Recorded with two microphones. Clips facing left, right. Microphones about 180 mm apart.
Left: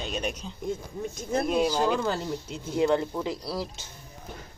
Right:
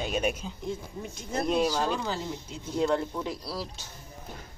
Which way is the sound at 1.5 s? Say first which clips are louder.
Left 1 dB; 10° left (ahead or behind).